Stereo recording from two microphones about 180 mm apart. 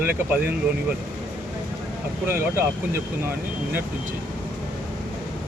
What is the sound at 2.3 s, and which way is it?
Speech, 15° right (ahead or behind).